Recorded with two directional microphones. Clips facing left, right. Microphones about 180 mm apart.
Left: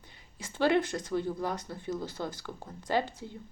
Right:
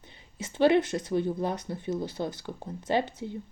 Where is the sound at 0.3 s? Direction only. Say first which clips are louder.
Right 4 dB; 20° right (ahead or behind).